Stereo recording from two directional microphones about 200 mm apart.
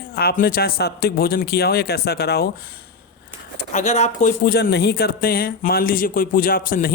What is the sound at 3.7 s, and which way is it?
Speech, 35° left (ahead or behind).